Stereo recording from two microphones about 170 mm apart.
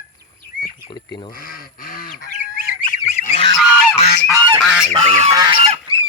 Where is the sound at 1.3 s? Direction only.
55° left (ahead or behind).